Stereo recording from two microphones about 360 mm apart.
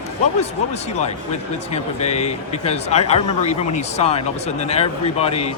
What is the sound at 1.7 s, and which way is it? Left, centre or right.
Speech, centre.